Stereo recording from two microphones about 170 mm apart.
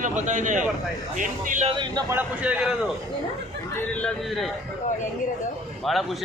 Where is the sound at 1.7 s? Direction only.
25° right (ahead or behind).